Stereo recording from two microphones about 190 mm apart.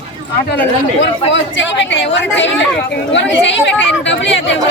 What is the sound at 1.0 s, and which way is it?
A woman's voice, 70° left (ahead or behind).